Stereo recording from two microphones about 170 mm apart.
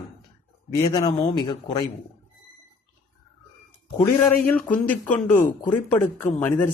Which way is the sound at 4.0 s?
15° left (ahead or behind).